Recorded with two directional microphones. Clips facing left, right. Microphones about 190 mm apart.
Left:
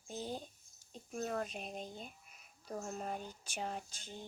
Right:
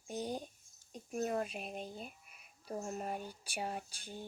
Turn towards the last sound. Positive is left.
turn(degrees=-10)  # may be behind; listen again after turning